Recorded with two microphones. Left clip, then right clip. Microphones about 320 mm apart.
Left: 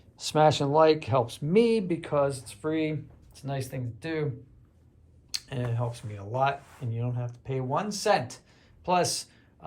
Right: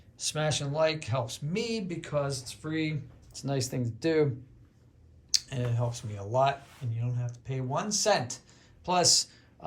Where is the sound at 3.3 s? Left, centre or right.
Centre.